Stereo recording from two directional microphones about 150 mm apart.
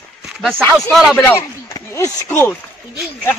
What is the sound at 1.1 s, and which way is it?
Speech, 15° left (ahead or behind).